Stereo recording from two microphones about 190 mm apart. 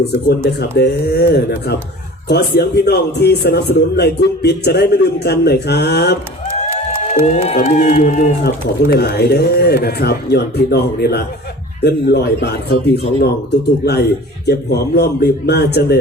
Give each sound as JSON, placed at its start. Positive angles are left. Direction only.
{"t": 0.0, "sound": "a man's voice", "side_deg": 60}
{"t": 7.5, "sound": "speech", "side_deg": 40}
{"t": 8.4, "sound": "a man's voice", "side_deg": 55}